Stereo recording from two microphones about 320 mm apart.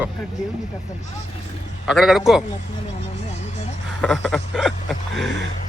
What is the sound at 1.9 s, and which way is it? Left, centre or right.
Speech, centre.